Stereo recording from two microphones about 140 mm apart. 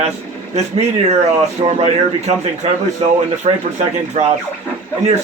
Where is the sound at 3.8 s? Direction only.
50° right (ahead or behind).